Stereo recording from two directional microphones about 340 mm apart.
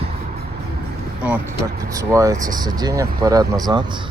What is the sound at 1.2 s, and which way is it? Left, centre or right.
Speech, centre.